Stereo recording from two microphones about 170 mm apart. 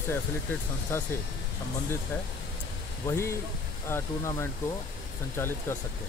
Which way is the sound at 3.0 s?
15° left (ahead or behind).